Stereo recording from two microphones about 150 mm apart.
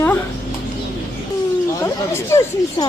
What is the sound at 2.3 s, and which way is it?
Speech, 20° left (ahead or behind).